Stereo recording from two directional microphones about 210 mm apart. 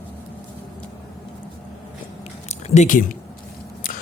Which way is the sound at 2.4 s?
30° left (ahead or behind).